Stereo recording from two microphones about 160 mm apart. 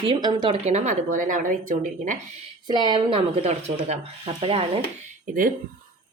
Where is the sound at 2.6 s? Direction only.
25° right (ahead or behind); by 4.0 s 45° right (ahead or behind).